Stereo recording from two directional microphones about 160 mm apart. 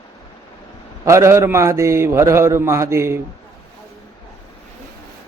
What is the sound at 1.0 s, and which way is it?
Speech, 15° right (ahead or behind).